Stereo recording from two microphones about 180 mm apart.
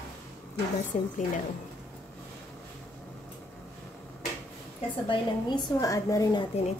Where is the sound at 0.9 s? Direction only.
35° left (ahead or behind).